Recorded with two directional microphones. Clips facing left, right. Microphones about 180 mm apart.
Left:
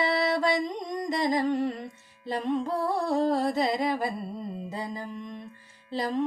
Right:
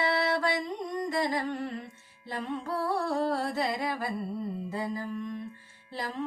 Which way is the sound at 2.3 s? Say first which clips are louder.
Left 5 dB; 15° left (ahead or behind).